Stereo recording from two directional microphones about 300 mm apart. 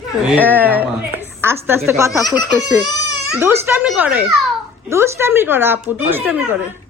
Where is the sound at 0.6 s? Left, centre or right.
Centre.